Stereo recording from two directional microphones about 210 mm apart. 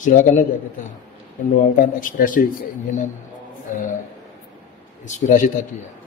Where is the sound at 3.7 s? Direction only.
40° left (ahead or behind).